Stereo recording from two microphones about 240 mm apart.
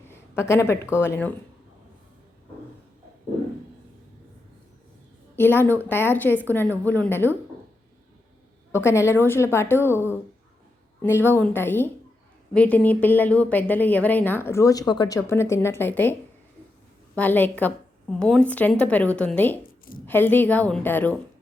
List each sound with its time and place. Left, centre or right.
0.1 s speech: centre
5.4 s a woman's voice: centre
8.7 s a woman's voice: centre
17.2 s a woman's voice: centre
19.6 s a sound: left
20.1 s a woman's voice: centre